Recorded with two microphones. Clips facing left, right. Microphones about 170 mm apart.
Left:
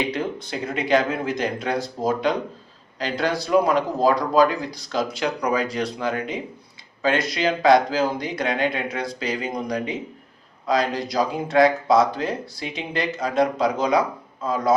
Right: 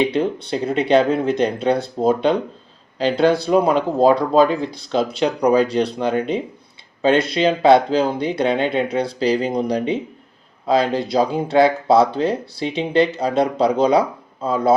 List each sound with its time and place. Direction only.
0.1 s speech: 30° right (ahead or behind)